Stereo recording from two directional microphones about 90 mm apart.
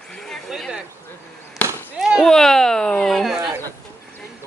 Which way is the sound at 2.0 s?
5° right (ahead or behind).